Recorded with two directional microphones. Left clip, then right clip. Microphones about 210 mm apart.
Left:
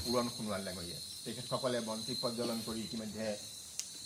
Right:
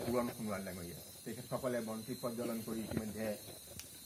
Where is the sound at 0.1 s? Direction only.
25° left (ahead or behind).